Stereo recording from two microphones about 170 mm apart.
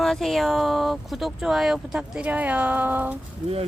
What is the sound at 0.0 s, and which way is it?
Speech, centre (ahead or behind).